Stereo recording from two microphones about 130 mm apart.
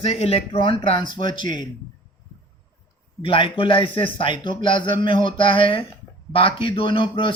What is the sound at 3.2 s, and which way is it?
Speech, 40° left (ahead or behind).